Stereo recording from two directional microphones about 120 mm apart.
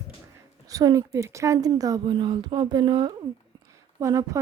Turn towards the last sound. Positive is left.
turn(degrees=-25)  # may be behind; listen again after turning